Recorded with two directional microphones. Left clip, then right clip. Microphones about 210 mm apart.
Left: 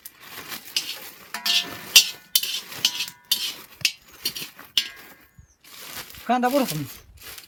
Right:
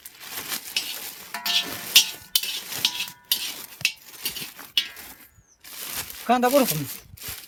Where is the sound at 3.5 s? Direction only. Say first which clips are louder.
Left 1 dB; 40° right (ahead or behind).